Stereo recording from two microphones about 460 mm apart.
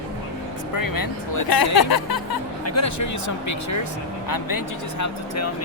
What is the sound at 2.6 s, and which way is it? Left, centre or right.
Speech, left.